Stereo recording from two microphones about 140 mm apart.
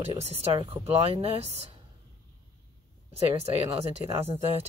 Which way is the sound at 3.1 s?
45° right (ahead or behind).